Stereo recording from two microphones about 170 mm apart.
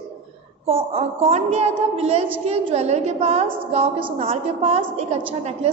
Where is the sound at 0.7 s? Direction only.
35° right (ahead or behind).